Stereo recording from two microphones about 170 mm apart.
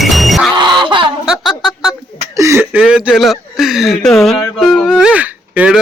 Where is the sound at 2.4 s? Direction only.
15° right (ahead or behind).